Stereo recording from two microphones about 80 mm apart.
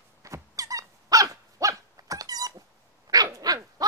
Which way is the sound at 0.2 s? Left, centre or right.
Right.